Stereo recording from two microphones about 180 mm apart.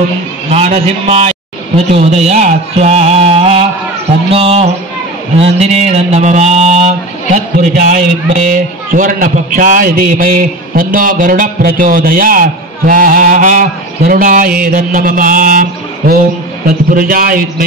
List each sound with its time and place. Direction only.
0.5 s mantra: 35° right (ahead or behind)
2.0 s music: 35° right (ahead or behind)
4.3 s mantra: 35° right (ahead or behind)
7.7 s a man's voice: 45° right (ahead or behind)
16.6 s a man's voice: 50° right (ahead or behind)